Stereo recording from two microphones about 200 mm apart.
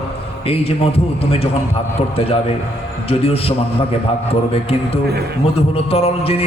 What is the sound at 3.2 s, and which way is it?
Music, 30° left (ahead or behind).